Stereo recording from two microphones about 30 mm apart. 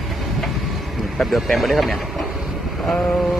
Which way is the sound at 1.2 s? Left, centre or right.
Centre.